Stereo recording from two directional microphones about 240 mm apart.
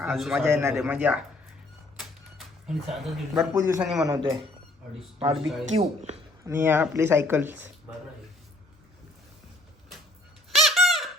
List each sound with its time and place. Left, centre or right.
0.0 s speech: centre
2.6 s a man's voice: centre
3.5 s speech: centre
4.0 s speech: centre
5.6 s speech: right
6.4 s speech: centre
10.5 s squeak: centre